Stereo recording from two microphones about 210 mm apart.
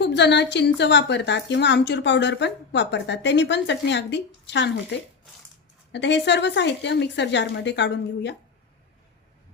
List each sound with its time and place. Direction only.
0.0 s a woman's voice: 55° left (ahead or behind)
5.9 s a woman's voice: 55° left (ahead or behind)